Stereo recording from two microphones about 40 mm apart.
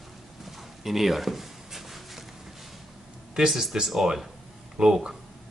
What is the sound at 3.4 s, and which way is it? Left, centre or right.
Speech, centre.